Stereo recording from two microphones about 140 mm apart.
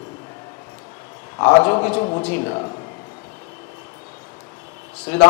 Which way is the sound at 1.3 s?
20° left (ahead or behind).